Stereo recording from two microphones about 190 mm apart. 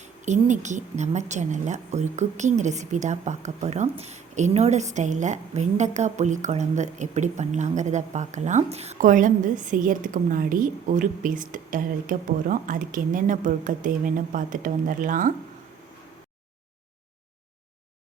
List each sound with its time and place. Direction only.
0.0 s speech: 40° right (ahead or behind)